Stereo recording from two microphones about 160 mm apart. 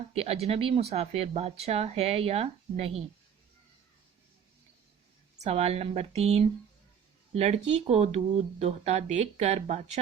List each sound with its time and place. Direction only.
0.1 s speech: 40° right (ahead or behind)
5.4 s speech: 40° right (ahead or behind)